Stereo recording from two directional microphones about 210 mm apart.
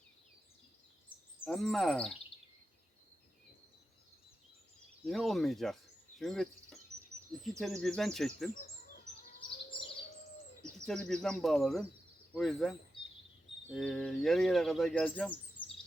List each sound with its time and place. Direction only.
1.5 s speech: centre (ahead or behind)
5.0 s speech: centre (ahead or behind)
9.6 s bird vocalization: 25° left (ahead or behind)
10.6 s speech: 5° left (ahead or behind)